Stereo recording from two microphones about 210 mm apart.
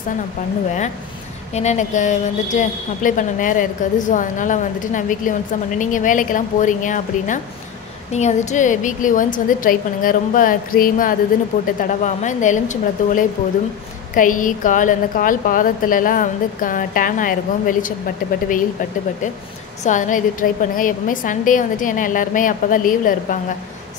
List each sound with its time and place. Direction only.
1.5 s a woman's voice: 30° left (ahead or behind)
19.8 s a woman's voice: 35° left (ahead or behind)